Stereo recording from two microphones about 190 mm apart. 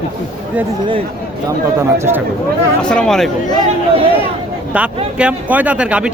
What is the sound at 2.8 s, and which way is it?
Speech, 5° left (ahead or behind).